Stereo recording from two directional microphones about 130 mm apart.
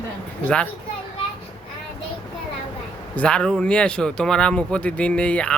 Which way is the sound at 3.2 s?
10° left (ahead or behind).